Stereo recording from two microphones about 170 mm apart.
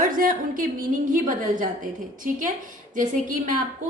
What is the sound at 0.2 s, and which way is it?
Speech, 55° right (ahead or behind).